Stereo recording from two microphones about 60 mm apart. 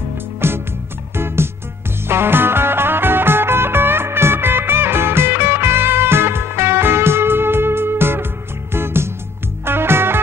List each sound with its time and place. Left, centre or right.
0.4 s music: right